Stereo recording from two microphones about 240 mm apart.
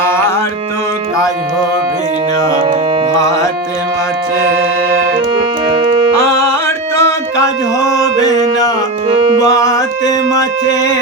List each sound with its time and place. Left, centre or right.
5.6 s music: right
6.1 s music: centre
9.0 s music: right
9.4 s music: centre